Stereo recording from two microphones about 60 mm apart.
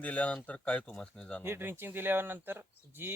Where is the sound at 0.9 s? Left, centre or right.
Centre.